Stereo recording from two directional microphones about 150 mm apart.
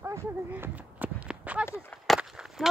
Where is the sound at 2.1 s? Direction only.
Centre (ahead or behind).